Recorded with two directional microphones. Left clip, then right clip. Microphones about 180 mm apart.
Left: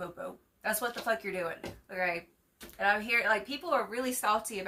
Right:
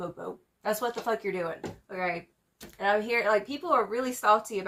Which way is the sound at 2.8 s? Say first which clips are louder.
Right 2 dB; 15° left (ahead or behind).